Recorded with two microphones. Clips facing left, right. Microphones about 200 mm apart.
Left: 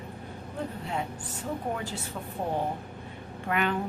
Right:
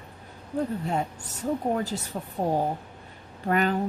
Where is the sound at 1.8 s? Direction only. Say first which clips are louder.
Right 6 dB; 40° right (ahead or behind).